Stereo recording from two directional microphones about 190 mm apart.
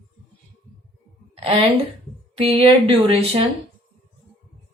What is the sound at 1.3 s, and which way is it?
A woman's voice, 30° right (ahead or behind).